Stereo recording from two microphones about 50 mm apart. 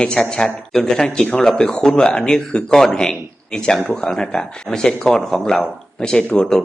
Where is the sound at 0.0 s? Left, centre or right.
Centre.